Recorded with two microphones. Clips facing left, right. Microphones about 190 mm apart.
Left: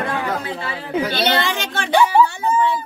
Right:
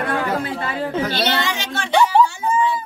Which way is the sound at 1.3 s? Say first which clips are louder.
Left 2 dB; 55° left (ahead or behind).